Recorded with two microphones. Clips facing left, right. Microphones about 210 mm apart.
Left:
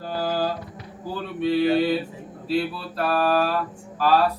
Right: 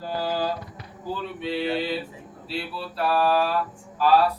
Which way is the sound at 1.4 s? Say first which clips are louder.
Left 8 dB; 50° left (ahead or behind).